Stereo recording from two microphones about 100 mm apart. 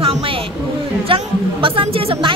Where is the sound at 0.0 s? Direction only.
65° right (ahead or behind).